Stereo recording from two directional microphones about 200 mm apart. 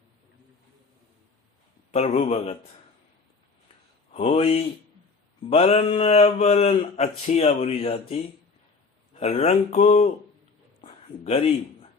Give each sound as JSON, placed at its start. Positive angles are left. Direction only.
{"t": 1.9, "sound": "speech", "side_deg": 35}
{"t": 4.1, "sound": "speech", "side_deg": 25}
{"t": 10.8, "sound": "a sound", "side_deg": 30}